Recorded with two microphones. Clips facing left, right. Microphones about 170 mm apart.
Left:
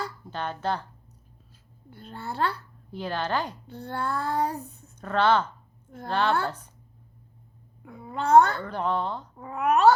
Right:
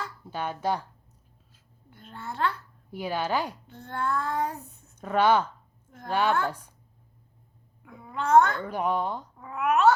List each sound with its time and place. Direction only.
0.3 s a woman's voice: 10° right (ahead or behind)
1.9 s child singing: 35° left (ahead or behind)
2.9 s a woman's voice: 10° right (ahead or behind)
3.7 s child singing: 35° left (ahead or behind)
4.9 s a woman's voice: 10° right (ahead or behind)
7.8 s a child's voice: 35° left (ahead or behind)
8.6 s a woman's voice: 10° right (ahead or behind)
9.4 s child singing: 35° left (ahead or behind)